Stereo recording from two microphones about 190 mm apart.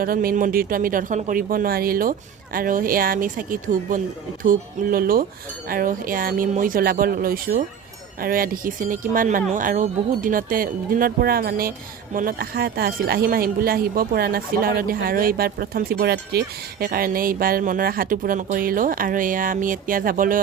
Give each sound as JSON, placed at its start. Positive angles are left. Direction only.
{"t": 0.0, "sound": "speech", "side_deg": -50}